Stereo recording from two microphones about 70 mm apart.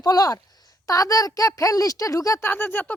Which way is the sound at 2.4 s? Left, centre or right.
Left.